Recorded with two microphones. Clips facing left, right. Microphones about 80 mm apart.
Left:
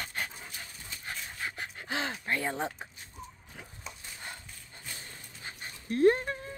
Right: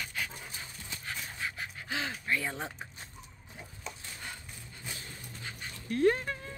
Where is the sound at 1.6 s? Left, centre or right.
Left.